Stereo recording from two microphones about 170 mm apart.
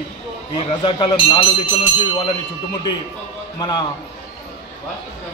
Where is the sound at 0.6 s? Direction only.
30° left (ahead or behind).